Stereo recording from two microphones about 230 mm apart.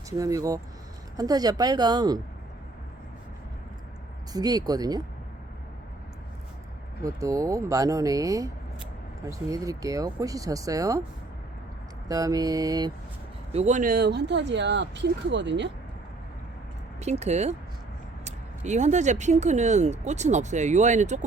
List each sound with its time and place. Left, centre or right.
0.2 s speech: centre
4.3 s speech: centre
7.0 s speech: centre
12.0 s speech: centre
13.5 s speech: right
17.0 s speech: right